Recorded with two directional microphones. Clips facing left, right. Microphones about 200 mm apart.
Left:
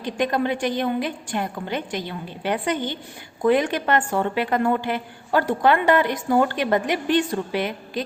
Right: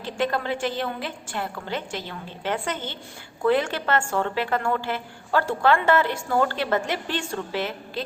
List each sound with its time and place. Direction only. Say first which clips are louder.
0.0 s a woman's voice: left 3 dB; 15° left (ahead or behind)